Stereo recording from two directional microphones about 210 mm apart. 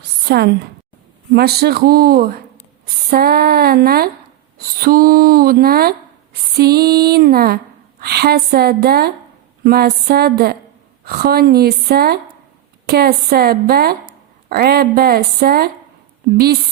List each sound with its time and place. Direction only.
0.3 s a woman's voice: 50° right (ahead or behind)